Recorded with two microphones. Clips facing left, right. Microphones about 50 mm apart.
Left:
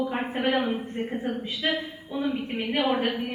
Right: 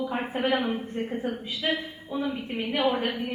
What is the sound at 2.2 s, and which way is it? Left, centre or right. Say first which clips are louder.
Speech: left 5 dB; left.